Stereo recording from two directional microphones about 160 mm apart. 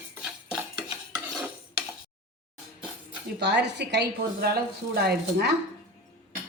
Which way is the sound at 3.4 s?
90° right.